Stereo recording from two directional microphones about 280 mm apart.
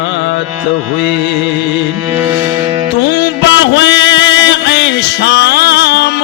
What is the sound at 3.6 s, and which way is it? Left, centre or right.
Music, left.